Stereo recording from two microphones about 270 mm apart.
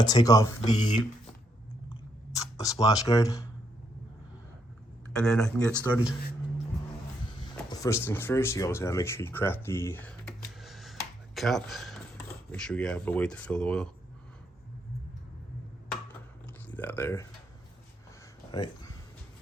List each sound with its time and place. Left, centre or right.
0.0 s speech: centre
0.6 s speech: left
1.9 s chewing: centre
5.2 s speech: centre
7.8 s speech: centre
10.6 s finger snapping: centre
11.3 s speech: centre
16.6 s speech: centre
18.5 s a sound: centre